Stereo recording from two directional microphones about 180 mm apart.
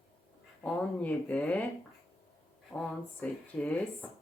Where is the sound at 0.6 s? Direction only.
5° left (ahead or behind).